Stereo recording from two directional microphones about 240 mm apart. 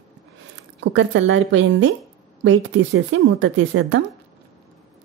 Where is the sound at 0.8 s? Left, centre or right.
Right.